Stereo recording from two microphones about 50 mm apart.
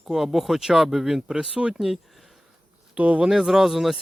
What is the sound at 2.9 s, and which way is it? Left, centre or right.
Speech, right.